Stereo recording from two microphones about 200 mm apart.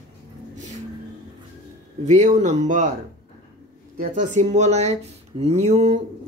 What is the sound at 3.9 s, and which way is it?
Speech, 40° right (ahead or behind).